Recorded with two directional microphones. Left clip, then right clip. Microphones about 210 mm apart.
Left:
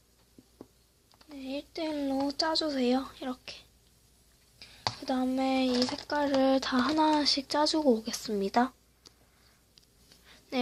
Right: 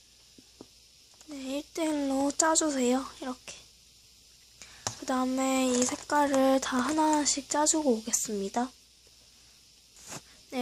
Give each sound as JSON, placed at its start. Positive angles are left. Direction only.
{"t": 1.4, "sound": "speech", "side_deg": -20}
{"t": 4.6, "sound": "speech", "side_deg": -15}
{"t": 10.5, "sound": "a sound", "side_deg": 0}